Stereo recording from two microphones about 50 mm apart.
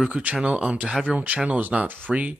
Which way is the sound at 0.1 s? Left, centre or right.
Right.